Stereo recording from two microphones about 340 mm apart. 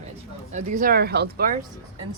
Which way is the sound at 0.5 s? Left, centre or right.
Right.